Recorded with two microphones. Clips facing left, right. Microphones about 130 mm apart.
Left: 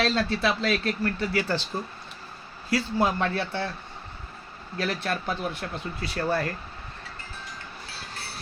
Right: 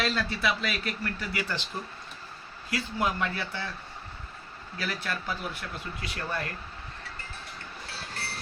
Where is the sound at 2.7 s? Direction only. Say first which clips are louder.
Left 5 dB; 30° left (ahead or behind).